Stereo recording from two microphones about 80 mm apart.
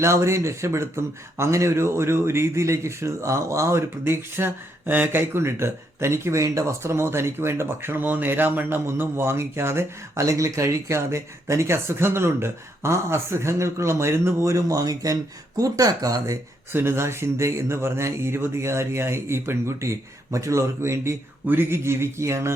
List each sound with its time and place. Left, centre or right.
0.0 s speech: right
16.7 s speech: right